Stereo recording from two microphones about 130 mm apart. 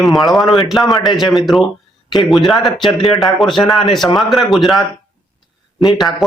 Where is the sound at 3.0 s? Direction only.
Centre (ahead or behind).